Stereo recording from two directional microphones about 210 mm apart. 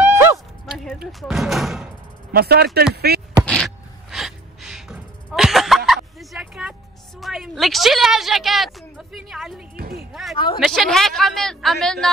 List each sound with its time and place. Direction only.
0.0 s a sound: 10° right (ahead or behind)
0.8 s speech: centre (ahead or behind)
2.3 s speech: 50° right (ahead or behind)
3.4 s gasp: 5° left (ahead or behind)
6.1 s bow-wow: centre (ahead or behind)
7.2 s a woman's voice: centre (ahead or behind)
9.8 s music: 45° right (ahead or behind)
10.3 s speech: 20° left (ahead or behind)
10.6 s speech: centre (ahead or behind)